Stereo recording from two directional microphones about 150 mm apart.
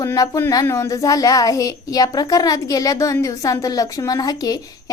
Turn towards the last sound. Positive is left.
turn(degrees=25)  # may be behind; listen again after turning